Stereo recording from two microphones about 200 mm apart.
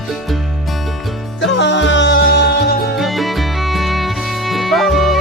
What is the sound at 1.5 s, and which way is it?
Music, 60° left (ahead or behind).